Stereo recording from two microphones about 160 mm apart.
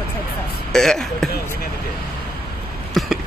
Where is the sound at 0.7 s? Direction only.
5° left (ahead or behind).